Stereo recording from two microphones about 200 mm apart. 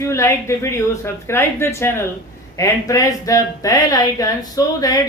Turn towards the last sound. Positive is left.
turn(degrees=20)  # may be behind; listen again after turning